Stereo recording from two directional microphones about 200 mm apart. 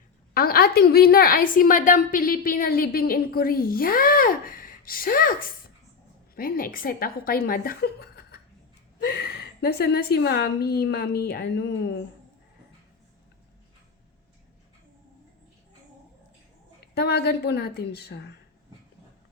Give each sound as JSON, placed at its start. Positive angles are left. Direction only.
{"t": 0.3, "sound": "a woman's voice", "side_deg": 50}
{"t": 16.8, "sound": "a woman's voice", "side_deg": 55}